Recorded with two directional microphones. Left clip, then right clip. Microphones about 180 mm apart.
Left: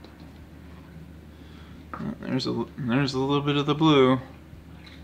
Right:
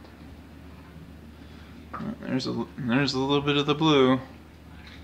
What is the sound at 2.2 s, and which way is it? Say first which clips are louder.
Speech: left 2 dB; 15° left (ahead or behind).